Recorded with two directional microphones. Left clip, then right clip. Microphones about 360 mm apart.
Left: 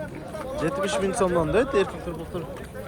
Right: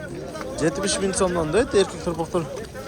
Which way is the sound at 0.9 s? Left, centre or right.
Centre.